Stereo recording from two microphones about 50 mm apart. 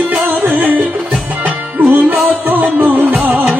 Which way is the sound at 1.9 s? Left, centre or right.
Right.